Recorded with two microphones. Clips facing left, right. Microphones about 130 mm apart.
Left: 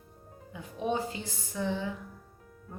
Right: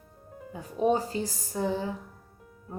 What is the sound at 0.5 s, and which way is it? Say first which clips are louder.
Speech: right 6 dB; 40° right (ahead or behind).